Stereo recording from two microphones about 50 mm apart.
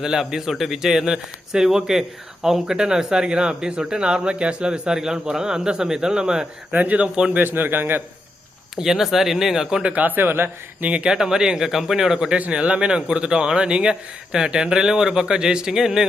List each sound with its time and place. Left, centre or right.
0.0 s speech: centre
6.7 s speech: right
7.3 s a man's voice: right
8.7 s speech: centre
9.9 s speech: right
10.8 s speech: right
12.5 s speech: right